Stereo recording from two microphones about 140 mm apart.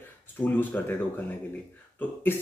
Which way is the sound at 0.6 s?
15° left (ahead or behind).